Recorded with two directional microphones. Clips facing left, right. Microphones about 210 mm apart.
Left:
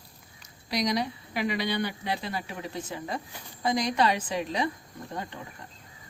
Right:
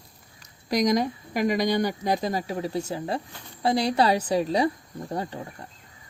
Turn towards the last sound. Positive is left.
turn(degrees=-40)  # may be behind; listen again after turning